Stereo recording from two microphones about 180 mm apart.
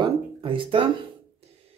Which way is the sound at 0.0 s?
30° right (ahead or behind).